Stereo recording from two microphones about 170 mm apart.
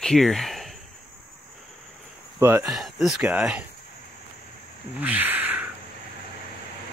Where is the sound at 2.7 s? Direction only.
Centre (ahead or behind).